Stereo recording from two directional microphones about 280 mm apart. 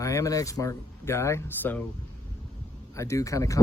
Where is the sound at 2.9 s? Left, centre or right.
Centre.